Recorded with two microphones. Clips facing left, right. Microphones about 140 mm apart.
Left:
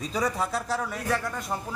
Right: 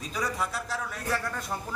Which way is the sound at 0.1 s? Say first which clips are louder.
Left 3 dB; 25° left (ahead or behind).